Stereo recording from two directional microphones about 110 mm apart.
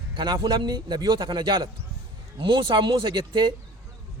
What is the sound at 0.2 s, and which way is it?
A man's voice, 45° right (ahead or behind).